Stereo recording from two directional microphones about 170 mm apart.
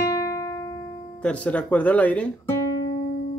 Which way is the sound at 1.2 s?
10° left (ahead or behind).